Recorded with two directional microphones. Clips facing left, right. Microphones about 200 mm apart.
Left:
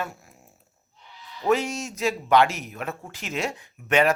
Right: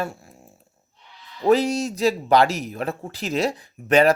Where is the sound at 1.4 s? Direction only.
35° right (ahead or behind).